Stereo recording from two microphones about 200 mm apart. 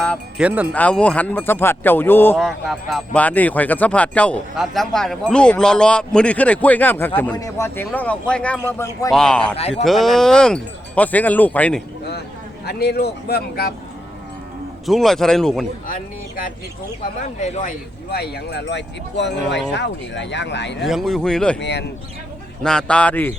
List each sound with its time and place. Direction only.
0.0 s wind chime: 5° left (ahead or behind)
0.4 s speech: 5° right (ahead or behind)
0.7 s speech: 5° left (ahead or behind)
8.8 s speech: 15° left (ahead or behind)
9.1 s speech: 5° left (ahead or behind)
12.6 s a man's voice: 55° left (ahead or behind)
14.8 s speech: centre (ahead or behind)
15.9 s a man's voice: 45° left (ahead or behind); by 20.7 s 60° left (ahead or behind)
20.8 s speech: centre (ahead or behind)
21.6 s speech: 55° left (ahead or behind)
22.6 s speech: 5° left (ahead or behind)